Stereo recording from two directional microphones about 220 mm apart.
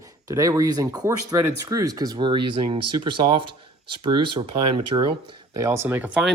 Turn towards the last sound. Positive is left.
turn(degrees=-5)  # may be behind; listen again after turning